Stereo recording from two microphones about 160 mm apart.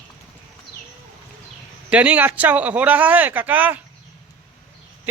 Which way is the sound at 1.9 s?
10° right (ahead or behind).